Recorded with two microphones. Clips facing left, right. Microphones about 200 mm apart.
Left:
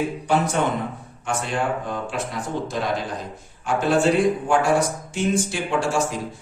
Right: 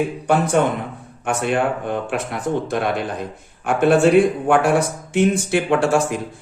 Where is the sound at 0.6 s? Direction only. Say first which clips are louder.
Right 4 dB; 55° right (ahead or behind).